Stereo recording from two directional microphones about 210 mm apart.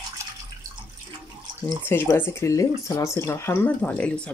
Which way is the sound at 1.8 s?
10° left (ahead or behind).